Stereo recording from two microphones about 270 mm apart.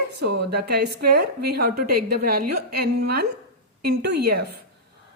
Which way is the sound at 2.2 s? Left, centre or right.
Right.